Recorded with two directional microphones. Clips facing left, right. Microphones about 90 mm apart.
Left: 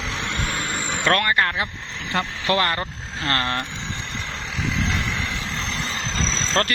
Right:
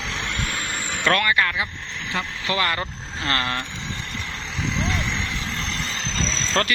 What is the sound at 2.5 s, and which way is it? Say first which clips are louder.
Speech: left 3 dB; 60° left (ahead or behind).